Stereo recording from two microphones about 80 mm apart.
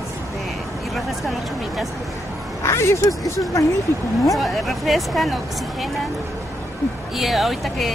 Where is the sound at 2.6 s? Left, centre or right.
Left.